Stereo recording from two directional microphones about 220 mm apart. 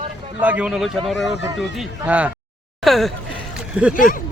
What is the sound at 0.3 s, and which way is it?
Speech, 5° right (ahead or behind).